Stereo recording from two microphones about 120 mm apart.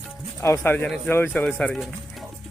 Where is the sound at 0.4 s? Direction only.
20° left (ahead or behind).